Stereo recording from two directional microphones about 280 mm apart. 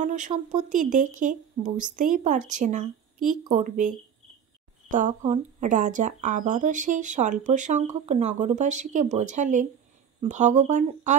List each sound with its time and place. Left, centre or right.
0.0 s speech: right
4.9 s speech: right